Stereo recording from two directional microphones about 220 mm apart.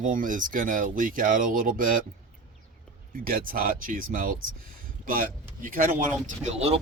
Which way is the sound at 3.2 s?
40° right (ahead or behind).